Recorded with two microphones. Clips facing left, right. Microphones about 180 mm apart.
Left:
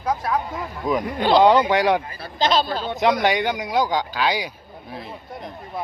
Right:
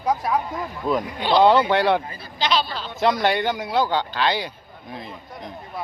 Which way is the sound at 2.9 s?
15° left (ahead or behind).